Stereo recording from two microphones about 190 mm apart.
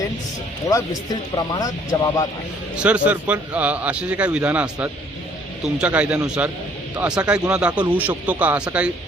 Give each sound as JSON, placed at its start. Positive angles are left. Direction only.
{"t": 1.4, "sound": "speech", "side_deg": 20}
{"t": 2.7, "sound": "a man's voice", "side_deg": -5}